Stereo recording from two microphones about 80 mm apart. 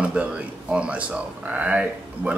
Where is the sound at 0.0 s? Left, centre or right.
Centre.